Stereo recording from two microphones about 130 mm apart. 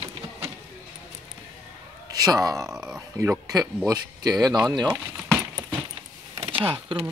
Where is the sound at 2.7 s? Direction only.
5° right (ahead or behind).